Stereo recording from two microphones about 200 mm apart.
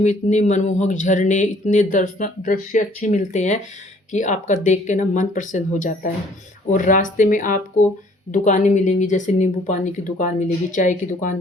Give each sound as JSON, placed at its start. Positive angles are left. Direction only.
{"t": 0.0, "sound": "speech", "side_deg": 35}